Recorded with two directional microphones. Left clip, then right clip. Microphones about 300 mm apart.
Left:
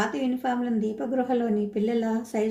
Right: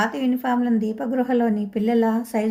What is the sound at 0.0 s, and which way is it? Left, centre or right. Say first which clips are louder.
Speech: right 4 dB; right.